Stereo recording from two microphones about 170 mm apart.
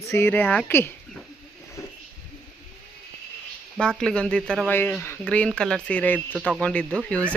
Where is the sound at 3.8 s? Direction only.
5° left (ahead or behind).